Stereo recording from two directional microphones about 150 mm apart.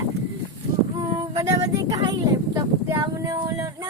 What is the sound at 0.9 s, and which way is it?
Female singing, 30° right (ahead or behind).